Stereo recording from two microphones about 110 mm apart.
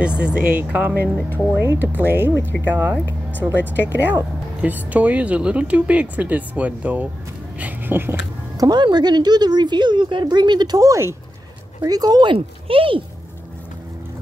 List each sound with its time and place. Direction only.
0.0 s speech: 10° right (ahead or behind)
3.6 s speech: 20° left (ahead or behind)
3.9 s speech: 15° right (ahead or behind)
8.5 s speech: 40° right (ahead or behind)
10.8 s speech: 25° right (ahead or behind); by 13.0 s 55° right (ahead or behind)